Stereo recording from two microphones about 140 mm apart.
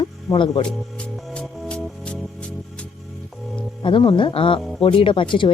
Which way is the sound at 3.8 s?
35° left (ahead or behind).